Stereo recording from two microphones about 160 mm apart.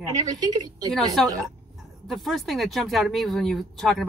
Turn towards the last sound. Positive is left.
turn(degrees=0)  # may be behind; listen again after turning